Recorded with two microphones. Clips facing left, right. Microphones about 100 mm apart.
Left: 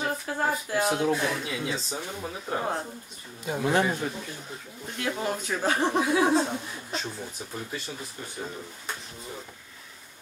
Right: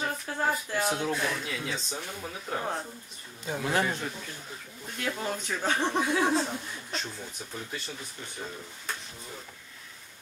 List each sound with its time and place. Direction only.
0.0 s speech: 5° left (ahead or behind)